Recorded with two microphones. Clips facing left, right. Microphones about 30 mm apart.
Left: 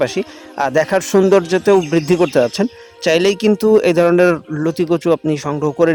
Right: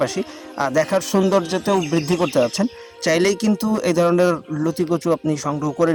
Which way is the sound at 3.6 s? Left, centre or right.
Left.